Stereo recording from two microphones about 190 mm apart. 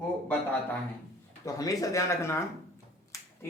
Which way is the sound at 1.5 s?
20° left (ahead or behind).